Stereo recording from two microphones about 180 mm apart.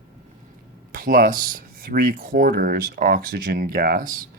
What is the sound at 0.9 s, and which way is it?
Speech, 50° right (ahead or behind).